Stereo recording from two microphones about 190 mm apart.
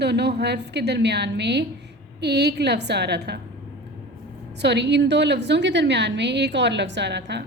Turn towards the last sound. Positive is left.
turn(degrees=-60)  # may be behind; listen again after turning